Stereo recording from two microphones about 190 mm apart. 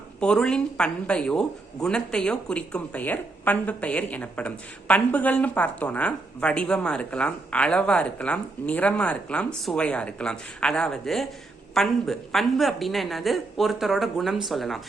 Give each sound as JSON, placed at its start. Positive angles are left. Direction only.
{"t": 0.2, "sound": "speech", "side_deg": 5}